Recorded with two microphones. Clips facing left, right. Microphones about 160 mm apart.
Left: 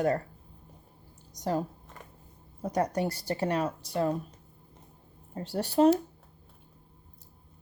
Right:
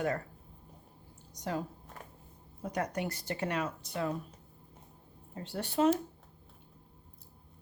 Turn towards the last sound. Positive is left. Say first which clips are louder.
# left 6 dB
turn(degrees=40)  # may be behind; listen again after turning